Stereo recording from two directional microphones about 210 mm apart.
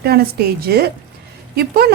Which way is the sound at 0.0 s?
50° right (ahead or behind).